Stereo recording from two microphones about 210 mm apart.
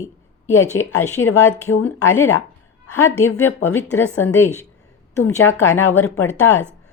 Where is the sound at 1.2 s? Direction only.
85° left.